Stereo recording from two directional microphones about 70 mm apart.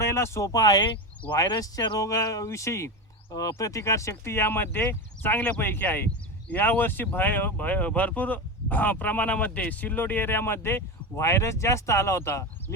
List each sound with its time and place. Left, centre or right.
0.0 s speech: left
2.0 s speech: left